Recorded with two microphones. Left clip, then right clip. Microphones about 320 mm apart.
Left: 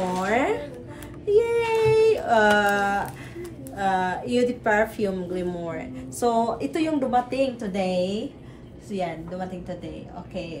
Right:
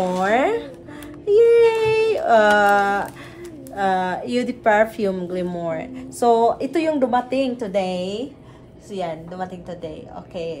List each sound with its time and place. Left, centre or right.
0.2 s speech: right
1.3 s a sound: right
3.7 s speech: right